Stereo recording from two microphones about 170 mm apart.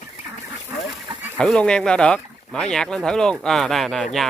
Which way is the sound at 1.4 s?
5° left (ahead or behind).